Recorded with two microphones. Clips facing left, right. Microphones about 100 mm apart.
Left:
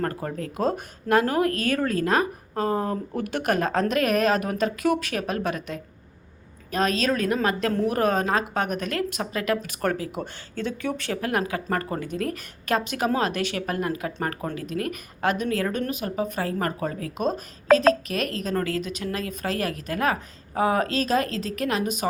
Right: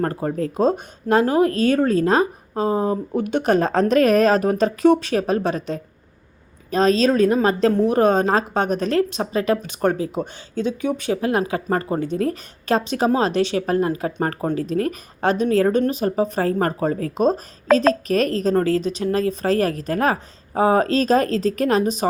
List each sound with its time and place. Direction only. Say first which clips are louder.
0.0 s a woman's voice: right 6 dB; 25° right (ahead or behind)